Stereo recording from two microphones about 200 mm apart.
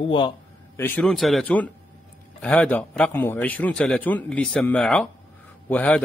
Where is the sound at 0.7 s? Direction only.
10° left (ahead or behind).